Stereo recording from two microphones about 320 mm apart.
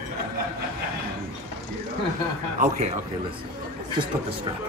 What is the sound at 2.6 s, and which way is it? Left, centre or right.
Speech, right.